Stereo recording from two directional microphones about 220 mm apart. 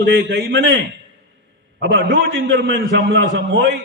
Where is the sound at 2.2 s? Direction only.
60° right (ahead or behind).